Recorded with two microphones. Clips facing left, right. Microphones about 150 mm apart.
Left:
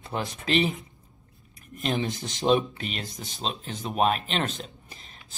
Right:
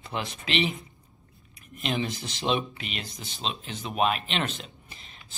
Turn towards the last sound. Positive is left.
turn(degrees=45)  # may be behind; listen again after turning